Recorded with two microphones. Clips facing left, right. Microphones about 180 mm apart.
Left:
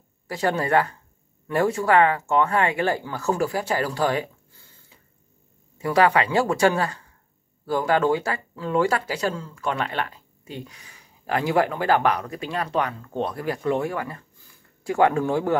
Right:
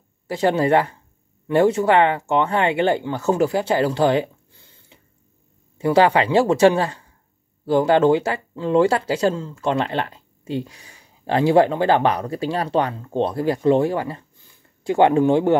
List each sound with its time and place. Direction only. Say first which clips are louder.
0.3 s speech: right 5 dB; 25° right (ahead or behind)